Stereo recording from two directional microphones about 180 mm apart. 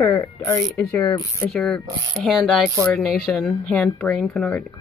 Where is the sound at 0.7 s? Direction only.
Centre (ahead or behind).